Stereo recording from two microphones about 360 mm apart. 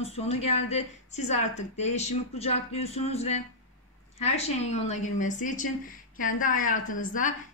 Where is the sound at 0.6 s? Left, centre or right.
Centre.